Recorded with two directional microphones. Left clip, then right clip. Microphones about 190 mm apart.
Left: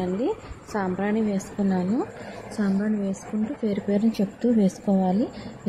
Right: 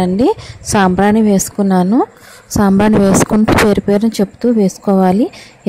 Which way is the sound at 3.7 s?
50° right (ahead or behind).